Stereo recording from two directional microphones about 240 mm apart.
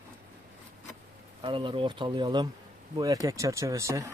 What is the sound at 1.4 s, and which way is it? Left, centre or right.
Speech, right.